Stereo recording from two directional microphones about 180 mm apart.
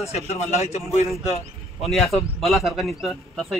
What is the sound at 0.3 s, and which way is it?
A man's voice, 35° left (ahead or behind).